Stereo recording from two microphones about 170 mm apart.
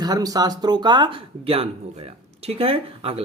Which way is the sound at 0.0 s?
25° right (ahead or behind).